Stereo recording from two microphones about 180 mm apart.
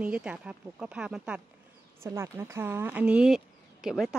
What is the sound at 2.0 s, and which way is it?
Speech, 15° right (ahead or behind).